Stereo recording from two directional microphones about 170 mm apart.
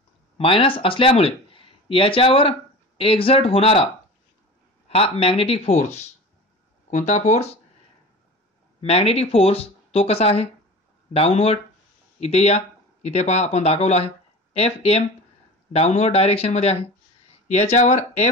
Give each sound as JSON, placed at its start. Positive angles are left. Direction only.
{"t": 0.4, "sound": "speech", "side_deg": 30}
{"t": 8.8, "sound": "speech", "side_deg": 35}